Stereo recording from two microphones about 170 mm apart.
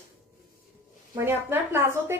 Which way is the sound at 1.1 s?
15° right (ahead or behind).